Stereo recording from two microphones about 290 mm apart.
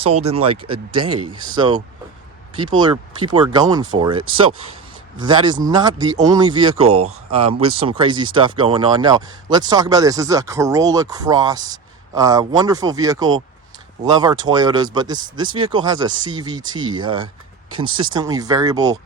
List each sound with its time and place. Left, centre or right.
0.0 s speech: right